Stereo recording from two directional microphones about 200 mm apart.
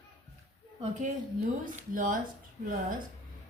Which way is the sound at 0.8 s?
35° right (ahead or behind).